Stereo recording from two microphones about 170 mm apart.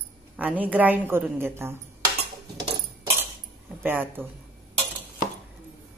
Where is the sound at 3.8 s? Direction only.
10° right (ahead or behind).